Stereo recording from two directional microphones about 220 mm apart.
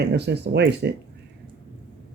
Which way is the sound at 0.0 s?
50° right (ahead or behind).